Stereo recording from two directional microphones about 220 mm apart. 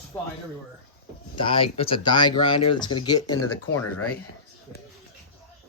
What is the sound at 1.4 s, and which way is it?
Speech, 25° left (ahead or behind).